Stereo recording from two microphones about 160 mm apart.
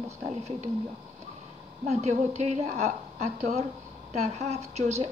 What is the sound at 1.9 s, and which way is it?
A woman's voice, 45° right (ahead or behind).